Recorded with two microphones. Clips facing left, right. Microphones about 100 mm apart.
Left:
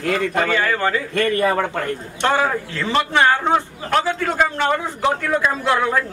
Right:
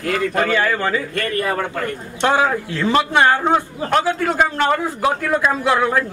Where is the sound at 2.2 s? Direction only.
10° right (ahead or behind).